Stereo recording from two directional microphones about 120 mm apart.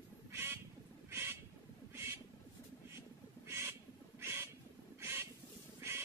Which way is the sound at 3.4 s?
25° right (ahead or behind).